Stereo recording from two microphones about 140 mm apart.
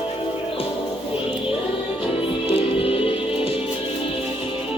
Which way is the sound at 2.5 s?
40° left (ahead or behind).